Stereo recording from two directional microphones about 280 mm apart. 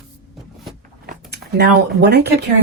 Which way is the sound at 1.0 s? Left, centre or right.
Right.